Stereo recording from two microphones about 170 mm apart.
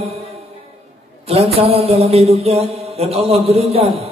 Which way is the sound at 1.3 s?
35° right (ahead or behind).